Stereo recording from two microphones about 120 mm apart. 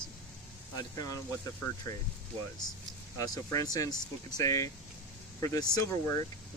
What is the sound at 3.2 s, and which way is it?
Speech, 30° left (ahead or behind).